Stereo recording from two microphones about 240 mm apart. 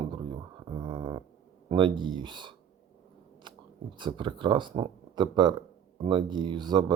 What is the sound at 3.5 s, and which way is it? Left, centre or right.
Chewing, centre.